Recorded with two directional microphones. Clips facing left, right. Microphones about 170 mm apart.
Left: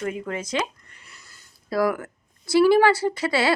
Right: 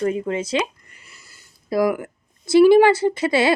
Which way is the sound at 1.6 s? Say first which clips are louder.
Right 3 dB; 15° right (ahead or behind).